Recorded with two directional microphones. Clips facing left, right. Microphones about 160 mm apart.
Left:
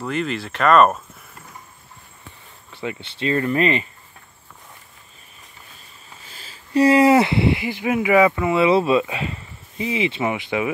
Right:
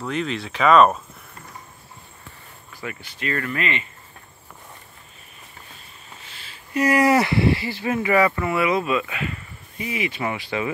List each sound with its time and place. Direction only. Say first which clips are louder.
0.0 s speech: left 2 dB; centre (ahead or behind)
2.7 s speech: left 5 dB; 25° left (ahead or behind)
6.2 s speech: left 1 dB; 30° left (ahead or behind)